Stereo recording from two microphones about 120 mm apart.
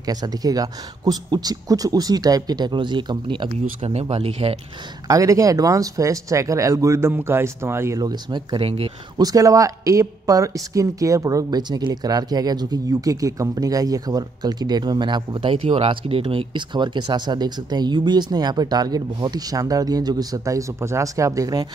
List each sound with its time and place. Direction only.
0.0 s speech: 30° right (ahead or behind)
3.8 s speech: 60° right (ahead or behind)
5.0 s speech: 30° right (ahead or behind)
8.0 s speech: 35° right (ahead or behind)
8.6 s speech: 55° right (ahead or behind)
9.2 s speech: 30° right (ahead or behind)